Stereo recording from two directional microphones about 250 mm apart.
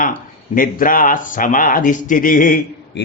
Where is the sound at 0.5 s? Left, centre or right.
Left.